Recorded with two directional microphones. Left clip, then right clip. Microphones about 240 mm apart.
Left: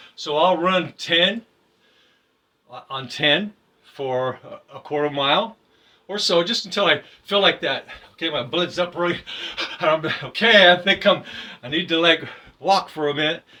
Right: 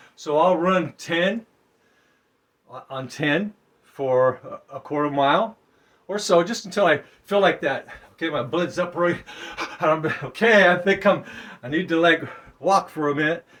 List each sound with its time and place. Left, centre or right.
0.3 s speech: right
2.9 s speech: right